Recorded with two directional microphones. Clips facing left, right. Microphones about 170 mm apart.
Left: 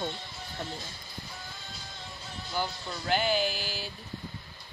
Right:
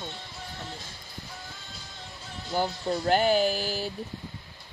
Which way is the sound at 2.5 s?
40° right (ahead or behind).